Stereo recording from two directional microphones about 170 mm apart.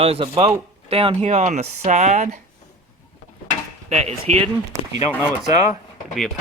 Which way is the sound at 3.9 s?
40° right (ahead or behind).